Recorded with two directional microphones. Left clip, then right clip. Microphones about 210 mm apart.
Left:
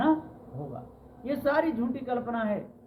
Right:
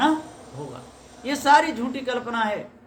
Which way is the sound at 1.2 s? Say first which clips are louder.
Right 9 dB; 20° right (ahead or behind).